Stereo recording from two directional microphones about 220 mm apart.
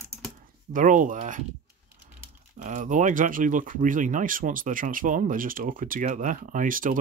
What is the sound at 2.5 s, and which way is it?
Speech, 35° right (ahead or behind).